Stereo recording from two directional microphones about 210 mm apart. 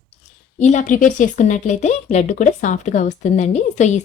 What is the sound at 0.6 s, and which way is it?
A woman's voice, 35° left (ahead or behind).